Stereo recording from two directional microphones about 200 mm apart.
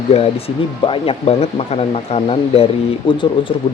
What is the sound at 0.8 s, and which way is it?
Speech, 25° left (ahead or behind).